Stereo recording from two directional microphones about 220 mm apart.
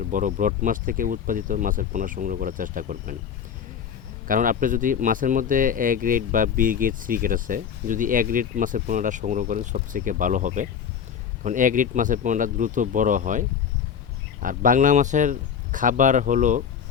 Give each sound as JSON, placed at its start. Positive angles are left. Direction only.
{"t": 0.0, "sound": "speech", "side_deg": -35}
{"t": 4.3, "sound": "speech", "side_deg": -40}
{"t": 14.4, "sound": "speech", "side_deg": -40}